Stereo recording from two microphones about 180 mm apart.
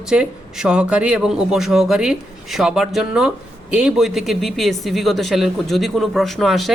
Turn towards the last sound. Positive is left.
turn(degrees=0)  # may be behind; listen again after turning